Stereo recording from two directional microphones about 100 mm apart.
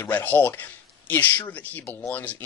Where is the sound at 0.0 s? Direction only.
20° left (ahead or behind).